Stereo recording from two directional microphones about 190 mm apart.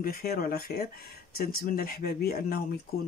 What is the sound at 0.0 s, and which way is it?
Speech, 50° left (ahead or behind).